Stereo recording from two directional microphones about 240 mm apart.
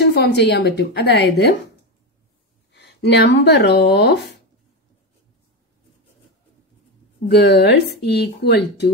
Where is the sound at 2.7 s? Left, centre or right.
Left.